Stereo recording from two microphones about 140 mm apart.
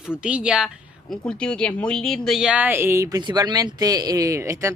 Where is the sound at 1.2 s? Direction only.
5° left (ahead or behind).